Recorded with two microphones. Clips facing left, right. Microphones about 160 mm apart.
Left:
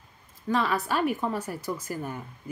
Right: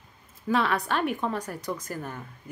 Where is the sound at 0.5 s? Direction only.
Centre (ahead or behind).